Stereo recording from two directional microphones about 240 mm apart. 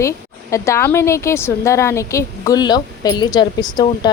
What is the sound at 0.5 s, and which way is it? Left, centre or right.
A woman's voice, centre.